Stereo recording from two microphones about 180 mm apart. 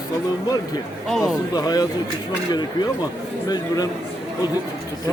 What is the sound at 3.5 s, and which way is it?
Speech, 20° left (ahead or behind).